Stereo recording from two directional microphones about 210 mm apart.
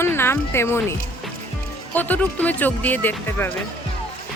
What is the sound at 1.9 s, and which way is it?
Speech, 10° left (ahead or behind).